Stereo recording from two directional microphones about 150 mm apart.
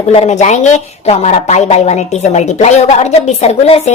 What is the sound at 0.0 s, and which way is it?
A woman's voice, 50° left (ahead or behind).